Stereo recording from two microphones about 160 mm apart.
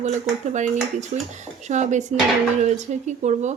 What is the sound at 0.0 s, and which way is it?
Speech, 45° right (ahead or behind).